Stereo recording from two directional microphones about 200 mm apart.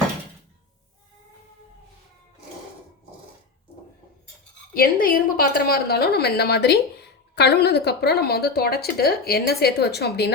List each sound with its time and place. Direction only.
4.7 s a woman's voice: 45° left (ahead or behind)